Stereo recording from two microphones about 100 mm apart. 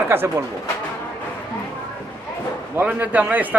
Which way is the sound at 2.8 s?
15° right (ahead or behind).